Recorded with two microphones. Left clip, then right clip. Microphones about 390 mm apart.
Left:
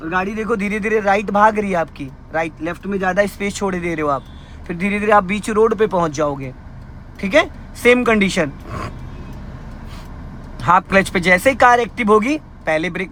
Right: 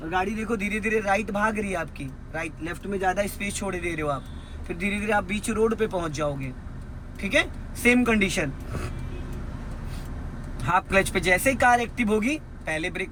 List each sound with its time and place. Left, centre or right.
0.1 s a man's voice: centre
10.6 s a man's voice: centre